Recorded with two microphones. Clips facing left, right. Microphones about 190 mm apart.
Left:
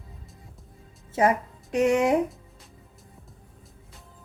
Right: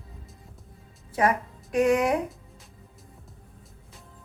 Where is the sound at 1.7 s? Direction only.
25° left (ahead or behind).